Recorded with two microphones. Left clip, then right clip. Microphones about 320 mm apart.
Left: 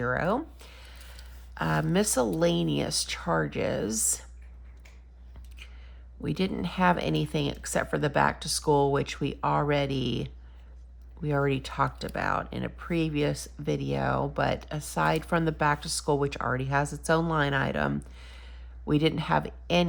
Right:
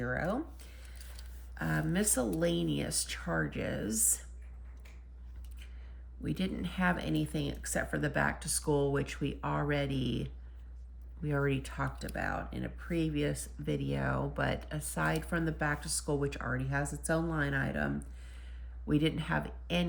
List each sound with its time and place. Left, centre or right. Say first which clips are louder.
0.0 s a sound: left 7 dB; centre
1.5 s speech: left 7 dB; centre
6.2 s speech: left 7 dB; centre